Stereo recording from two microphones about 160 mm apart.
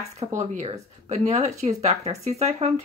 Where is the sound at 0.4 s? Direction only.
45° right (ahead or behind).